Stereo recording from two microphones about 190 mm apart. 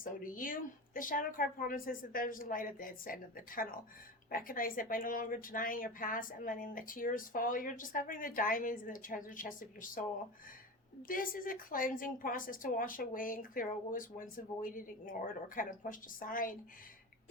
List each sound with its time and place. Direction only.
0.0 s a woman's voice: 45° left (ahead or behind)
11.1 s a woman's voice: 45° left (ahead or behind)